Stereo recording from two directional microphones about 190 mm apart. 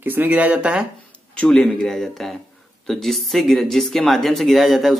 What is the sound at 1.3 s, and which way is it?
Speech, 5° left (ahead or behind).